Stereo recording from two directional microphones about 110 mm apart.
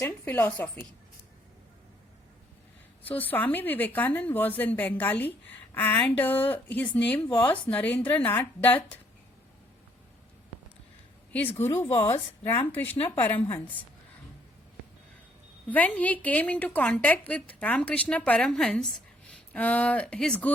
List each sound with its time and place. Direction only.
0.0 s a woman's voice: 20° left (ahead or behind)
3.0 s a woman's voice: 15° left (ahead or behind)
11.3 s a woman's voice: 15° left (ahead or behind)
15.7 s a woman's voice: 15° left (ahead or behind)